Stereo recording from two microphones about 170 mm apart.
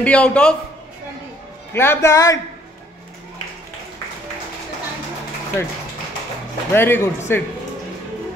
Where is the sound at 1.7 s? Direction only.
15° left (ahead or behind).